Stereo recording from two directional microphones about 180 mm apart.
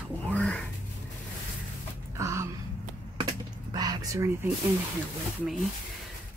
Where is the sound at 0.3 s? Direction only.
5° left (ahead or behind).